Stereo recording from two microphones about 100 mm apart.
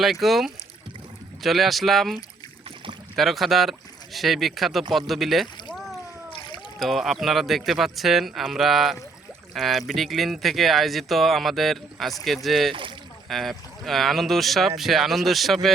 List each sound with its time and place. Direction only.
0.0 s speech: centre (ahead or behind)
3.2 s speech: centre (ahead or behind)
6.3 s splash: 55° left (ahead or behind)
6.7 s speech: centre (ahead or behind)